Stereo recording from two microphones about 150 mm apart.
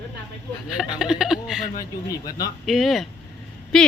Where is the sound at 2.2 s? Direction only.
25° left (ahead or behind).